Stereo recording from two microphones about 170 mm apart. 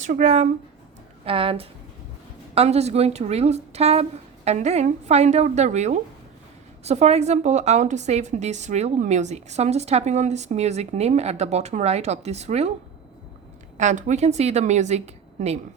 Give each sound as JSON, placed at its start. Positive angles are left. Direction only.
{"t": 0.0, "sound": "speech", "side_deg": -45}
{"t": 1.2, "sound": "a woman's voice", "side_deg": -35}
{"t": 13.7, "sound": "a woman's voice", "side_deg": -45}